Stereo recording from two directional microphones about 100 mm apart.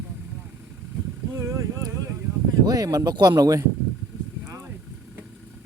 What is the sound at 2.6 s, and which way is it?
Speech, 40° right (ahead or behind).